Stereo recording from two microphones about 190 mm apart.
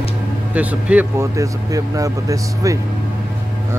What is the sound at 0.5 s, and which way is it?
Speech, 5° right (ahead or behind).